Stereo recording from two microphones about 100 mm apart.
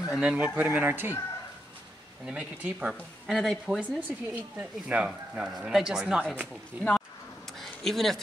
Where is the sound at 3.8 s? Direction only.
15° right (ahead or behind).